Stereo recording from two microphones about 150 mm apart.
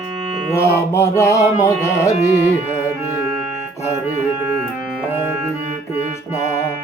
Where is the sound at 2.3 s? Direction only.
15° right (ahead or behind).